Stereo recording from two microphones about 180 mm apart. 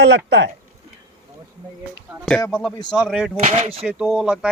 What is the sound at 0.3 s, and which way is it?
Speech, 75° right (ahead or behind).